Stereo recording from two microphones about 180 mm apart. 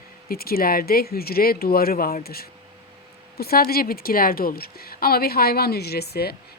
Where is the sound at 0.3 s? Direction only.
55° left (ahead or behind).